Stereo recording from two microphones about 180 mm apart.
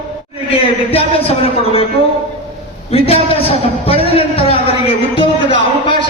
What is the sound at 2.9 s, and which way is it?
A man's voice, 35° left (ahead or behind).